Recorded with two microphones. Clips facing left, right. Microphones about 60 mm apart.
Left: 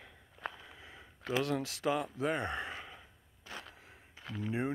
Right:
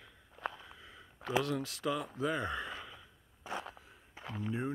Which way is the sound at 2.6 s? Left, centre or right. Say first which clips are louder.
Even; left.